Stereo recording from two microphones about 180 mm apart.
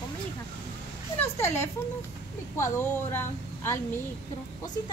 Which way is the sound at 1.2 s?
15° left (ahead or behind).